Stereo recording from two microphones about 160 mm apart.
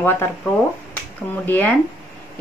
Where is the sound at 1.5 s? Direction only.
10° left (ahead or behind).